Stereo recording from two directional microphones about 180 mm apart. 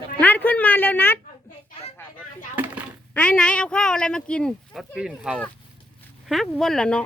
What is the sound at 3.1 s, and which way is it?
Speech, 5° left (ahead or behind).